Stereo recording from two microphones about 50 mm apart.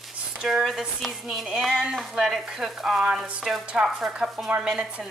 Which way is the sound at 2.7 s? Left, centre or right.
Centre.